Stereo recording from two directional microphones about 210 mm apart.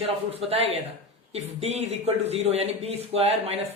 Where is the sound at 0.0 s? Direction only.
30° right (ahead or behind).